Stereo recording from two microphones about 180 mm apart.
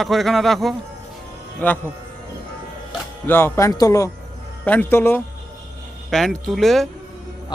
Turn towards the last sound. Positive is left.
turn(degrees=0)  # may be behind; listen again after turning